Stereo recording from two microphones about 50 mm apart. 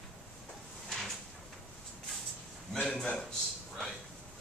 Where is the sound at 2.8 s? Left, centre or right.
Centre.